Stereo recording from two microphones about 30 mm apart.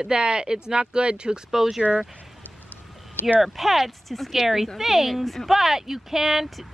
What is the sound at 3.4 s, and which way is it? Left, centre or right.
Speech, centre.